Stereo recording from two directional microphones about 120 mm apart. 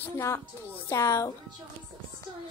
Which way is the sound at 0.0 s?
25° left (ahead or behind).